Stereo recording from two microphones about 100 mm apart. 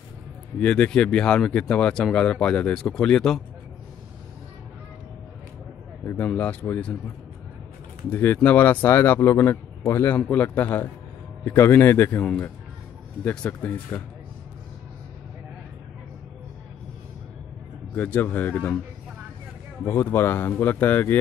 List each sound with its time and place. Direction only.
0.6 s speech: 10° left (ahead or behind)
6.1 s speech: 15° left (ahead or behind)
8.1 s speech: 20° left (ahead or behind)
12.2 s speech: 10° left (ahead or behind)
17.9 s speech: 15° left (ahead or behind)
19.8 s speech: 20° left (ahead or behind)